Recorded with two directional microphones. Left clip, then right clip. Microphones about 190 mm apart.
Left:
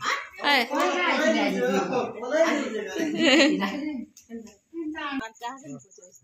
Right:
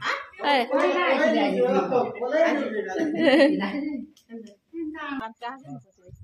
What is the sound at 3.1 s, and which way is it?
Speech, 20° right (ahead or behind).